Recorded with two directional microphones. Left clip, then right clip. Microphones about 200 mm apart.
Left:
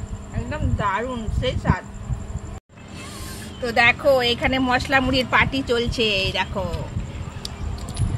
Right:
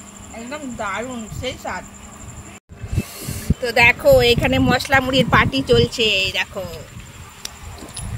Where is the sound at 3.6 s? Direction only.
20° right (ahead or behind).